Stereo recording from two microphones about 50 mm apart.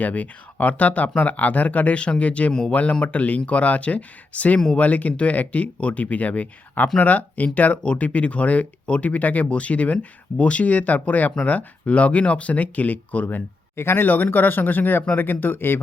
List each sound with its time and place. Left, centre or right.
0.0 s speech: left
2.5 s speech: centre
2.9 s speech: left
13.7 s speech: left
14.1 s speech: left